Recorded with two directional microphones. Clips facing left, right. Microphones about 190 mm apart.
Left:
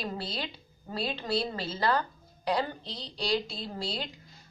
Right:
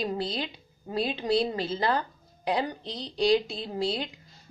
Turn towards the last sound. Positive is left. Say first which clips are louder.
# right 6 dB
turn(degrees=-20)  # may be behind; listen again after turning